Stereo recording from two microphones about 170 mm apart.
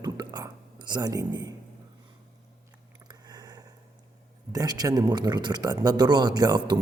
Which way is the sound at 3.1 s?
25° right (ahead or behind).